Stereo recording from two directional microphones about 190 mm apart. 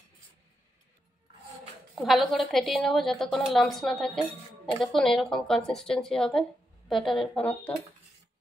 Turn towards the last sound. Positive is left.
turn(degrees=5)  # may be behind; listen again after turning